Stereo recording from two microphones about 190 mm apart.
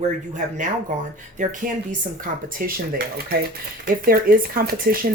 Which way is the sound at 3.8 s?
50° right (ahead or behind).